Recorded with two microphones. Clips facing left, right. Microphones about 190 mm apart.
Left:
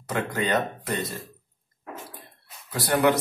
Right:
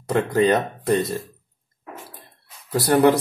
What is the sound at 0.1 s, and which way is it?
Speech, 35° right (ahead or behind).